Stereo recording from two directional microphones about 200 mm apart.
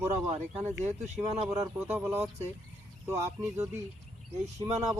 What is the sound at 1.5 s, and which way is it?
Speech, 10° right (ahead or behind).